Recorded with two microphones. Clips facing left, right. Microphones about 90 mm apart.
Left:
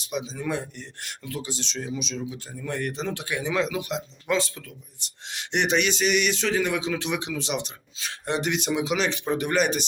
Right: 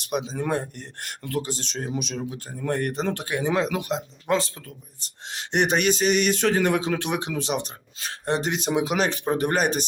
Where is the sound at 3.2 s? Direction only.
40° right (ahead or behind).